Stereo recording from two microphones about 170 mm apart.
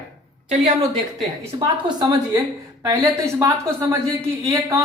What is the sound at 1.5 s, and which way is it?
Speech, 25° right (ahead or behind).